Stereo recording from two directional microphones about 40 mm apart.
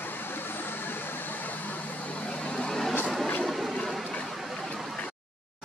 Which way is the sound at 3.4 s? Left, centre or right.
Centre.